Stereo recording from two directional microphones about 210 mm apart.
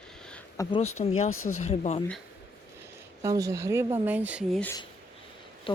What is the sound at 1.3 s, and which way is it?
Speech, 80° left.